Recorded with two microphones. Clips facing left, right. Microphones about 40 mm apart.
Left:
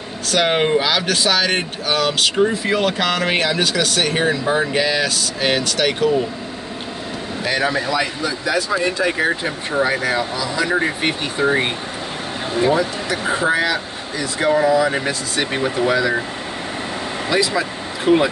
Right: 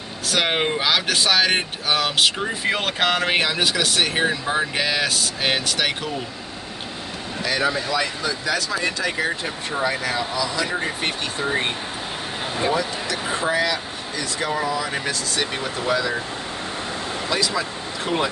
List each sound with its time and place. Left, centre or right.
0.3 s speech: centre
3.2 s speech: centre
7.4 s speech: left
7.9 s speech: centre
12.7 s speech: left
17.3 s speech: centre